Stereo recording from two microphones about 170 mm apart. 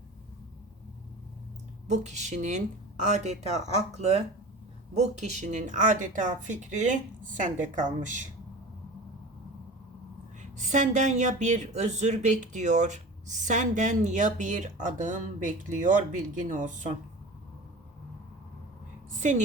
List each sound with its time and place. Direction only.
1.9 s speech: 40° right (ahead or behind)
10.6 s speech: 45° right (ahead or behind)